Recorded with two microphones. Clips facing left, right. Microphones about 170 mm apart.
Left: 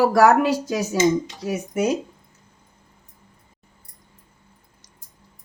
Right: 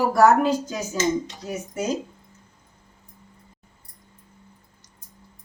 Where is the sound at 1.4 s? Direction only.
70° left (ahead or behind).